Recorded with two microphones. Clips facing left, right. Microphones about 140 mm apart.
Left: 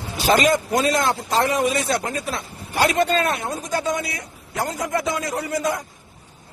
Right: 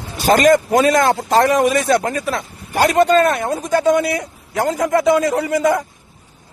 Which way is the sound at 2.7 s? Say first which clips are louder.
Right 6 dB; 45° right (ahead or behind).